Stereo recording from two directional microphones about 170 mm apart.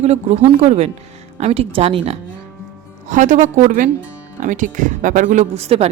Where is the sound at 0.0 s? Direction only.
40° right (ahead or behind).